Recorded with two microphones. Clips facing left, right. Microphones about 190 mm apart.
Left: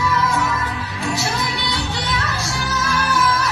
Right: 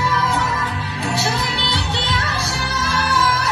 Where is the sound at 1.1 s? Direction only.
30° right (ahead or behind).